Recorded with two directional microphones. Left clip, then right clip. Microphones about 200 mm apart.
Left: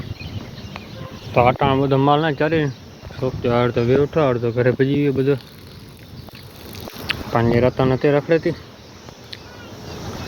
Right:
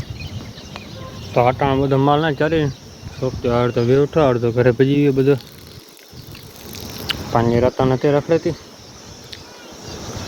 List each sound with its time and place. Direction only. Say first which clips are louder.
1.3 s speech: even; 5° right (ahead or behind)
3.2 s speech: even; centre (ahead or behind)
3.8 s speech: right 2 dB; 25° right (ahead or behind)
7.3 s speech: right 1 dB; 5° right (ahead or behind)